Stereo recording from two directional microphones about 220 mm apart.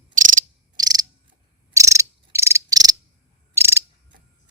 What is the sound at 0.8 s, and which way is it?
Frog, 15° right (ahead or behind).